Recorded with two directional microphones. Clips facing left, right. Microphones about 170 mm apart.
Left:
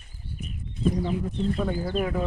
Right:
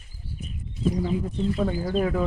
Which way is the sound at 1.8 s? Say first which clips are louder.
Right 4 dB; 35° right (ahead or behind).